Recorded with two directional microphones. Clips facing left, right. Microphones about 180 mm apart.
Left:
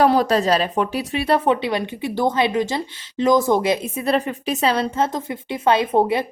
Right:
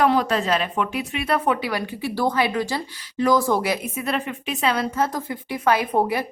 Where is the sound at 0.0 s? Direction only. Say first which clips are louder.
Left 3 dB; 40° left (ahead or behind).